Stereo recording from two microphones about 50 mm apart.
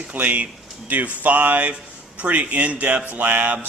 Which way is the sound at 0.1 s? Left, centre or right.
Right.